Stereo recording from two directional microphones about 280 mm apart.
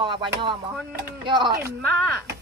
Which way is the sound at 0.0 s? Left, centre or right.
Centre.